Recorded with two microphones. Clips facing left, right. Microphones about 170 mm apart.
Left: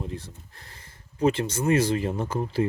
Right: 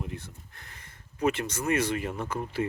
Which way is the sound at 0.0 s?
35° left (ahead or behind).